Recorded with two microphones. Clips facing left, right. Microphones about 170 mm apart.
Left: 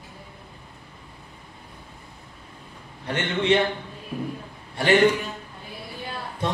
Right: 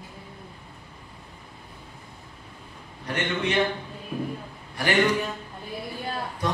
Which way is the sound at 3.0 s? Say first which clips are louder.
Left 2 dB; 25° left (ahead or behind).